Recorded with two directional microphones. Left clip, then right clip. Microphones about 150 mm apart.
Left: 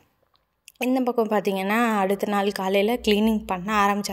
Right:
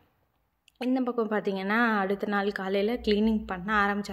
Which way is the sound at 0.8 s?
20° left (ahead or behind).